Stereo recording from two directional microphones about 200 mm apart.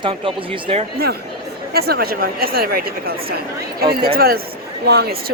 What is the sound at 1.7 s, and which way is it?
Speech, 50° right (ahead or behind).